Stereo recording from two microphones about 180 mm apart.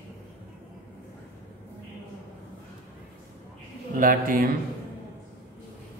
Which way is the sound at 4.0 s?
50° right (ahead or behind).